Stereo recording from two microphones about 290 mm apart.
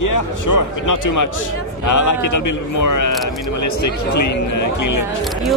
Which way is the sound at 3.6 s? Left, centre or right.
Left.